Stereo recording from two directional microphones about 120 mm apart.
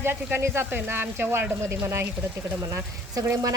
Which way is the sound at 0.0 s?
20° right (ahead or behind).